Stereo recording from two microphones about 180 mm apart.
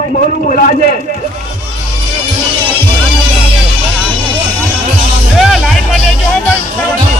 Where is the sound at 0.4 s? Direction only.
50° left (ahead or behind).